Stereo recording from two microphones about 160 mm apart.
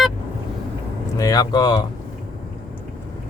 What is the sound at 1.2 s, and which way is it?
Speech, 25° left (ahead or behind).